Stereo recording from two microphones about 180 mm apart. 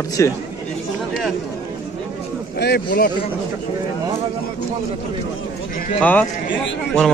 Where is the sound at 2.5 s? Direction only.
60° left (ahead or behind).